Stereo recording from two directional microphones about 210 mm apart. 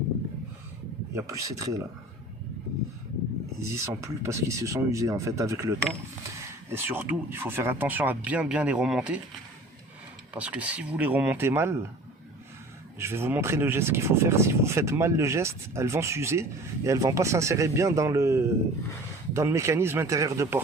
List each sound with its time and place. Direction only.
1.1 s speech: 15° right (ahead or behind)
3.6 s speech: 15° right (ahead or behind)
10.3 s speech: 5° right (ahead or behind)
13.0 s speech: 10° right (ahead or behind)